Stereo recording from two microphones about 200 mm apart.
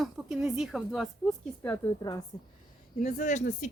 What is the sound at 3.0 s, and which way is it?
Speech, 35° left (ahead or behind).